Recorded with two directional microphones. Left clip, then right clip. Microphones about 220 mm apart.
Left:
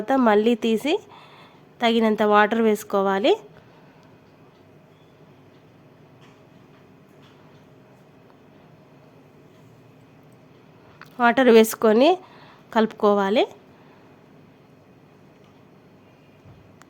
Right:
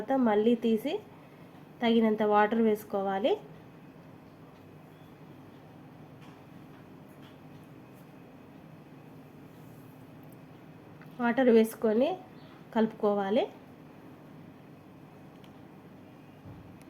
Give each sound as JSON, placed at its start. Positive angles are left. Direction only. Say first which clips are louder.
{"t": 0.0, "sound": "a woman's voice", "louder": "left 8 dB", "side_deg": 45}
{"t": 11.0, "sound": "a woman's voice", "louder": "left 9 dB", "side_deg": 45}